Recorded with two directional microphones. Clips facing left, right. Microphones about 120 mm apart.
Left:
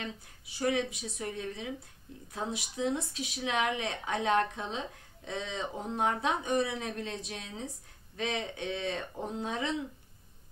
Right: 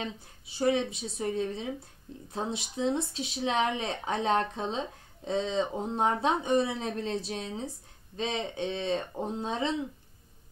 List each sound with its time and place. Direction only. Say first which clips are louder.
0.0 s speech: right 3 dB; 30° right (ahead or behind)